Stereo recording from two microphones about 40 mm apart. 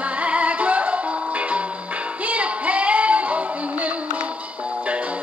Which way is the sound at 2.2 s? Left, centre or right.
Right.